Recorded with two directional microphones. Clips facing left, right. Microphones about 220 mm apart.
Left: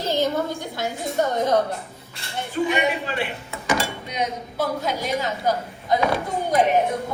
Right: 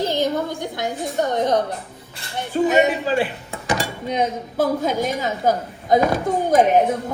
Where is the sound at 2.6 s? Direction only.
40° right (ahead or behind).